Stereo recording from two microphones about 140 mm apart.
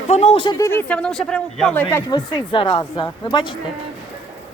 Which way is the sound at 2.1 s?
35° left (ahead or behind).